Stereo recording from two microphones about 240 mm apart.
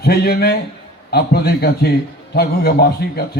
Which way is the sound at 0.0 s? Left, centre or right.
Left.